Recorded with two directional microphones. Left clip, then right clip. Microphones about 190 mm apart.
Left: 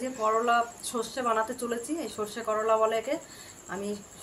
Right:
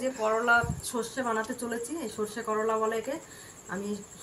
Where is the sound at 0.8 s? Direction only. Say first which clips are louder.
Left 2 dB; 30° left (ahead or behind).